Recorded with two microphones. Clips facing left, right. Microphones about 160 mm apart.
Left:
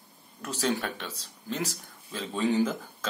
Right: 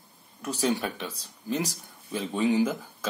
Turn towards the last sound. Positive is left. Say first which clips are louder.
# right 1 dB
turn(degrees=-10)  # may be behind; listen again after turning